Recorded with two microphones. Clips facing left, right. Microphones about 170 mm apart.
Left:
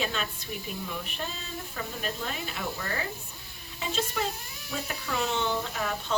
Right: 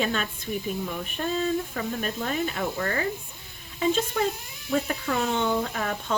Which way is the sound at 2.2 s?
50° right (ahead or behind).